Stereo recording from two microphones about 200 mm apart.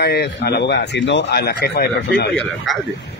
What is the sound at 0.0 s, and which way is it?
Speech, 55° left (ahead or behind).